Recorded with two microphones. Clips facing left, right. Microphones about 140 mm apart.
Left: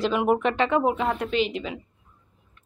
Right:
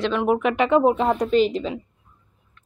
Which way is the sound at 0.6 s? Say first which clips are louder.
Right 5 dB; 20° right (ahead or behind).